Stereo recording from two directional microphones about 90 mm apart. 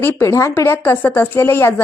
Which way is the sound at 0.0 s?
30° left (ahead or behind).